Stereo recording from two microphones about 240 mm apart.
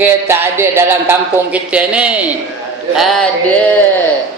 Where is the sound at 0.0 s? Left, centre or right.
Centre.